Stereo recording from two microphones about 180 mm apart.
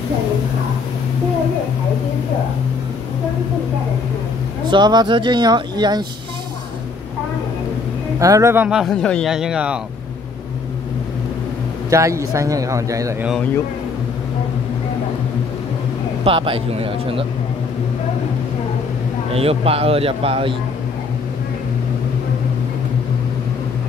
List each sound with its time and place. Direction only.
4.6 s speech: 25° right (ahead or behind)
8.2 s speech: 15° right (ahead or behind)
11.9 s speech: 15° right (ahead or behind)
16.3 s a man's voice: 30° right (ahead or behind)
19.3 s a man's voice: 35° right (ahead or behind)